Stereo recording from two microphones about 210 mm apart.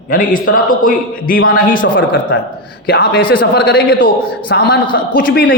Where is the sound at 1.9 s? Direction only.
55° left (ahead or behind).